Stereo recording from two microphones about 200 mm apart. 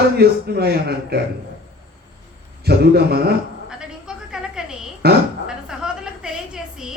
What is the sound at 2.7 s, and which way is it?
Speech, 50° right (ahead or behind).